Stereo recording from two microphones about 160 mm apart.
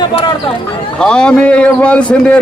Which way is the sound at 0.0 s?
30° left (ahead or behind).